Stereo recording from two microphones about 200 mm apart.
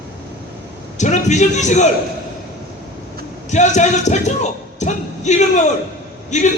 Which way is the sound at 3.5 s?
35° left (ahead or behind).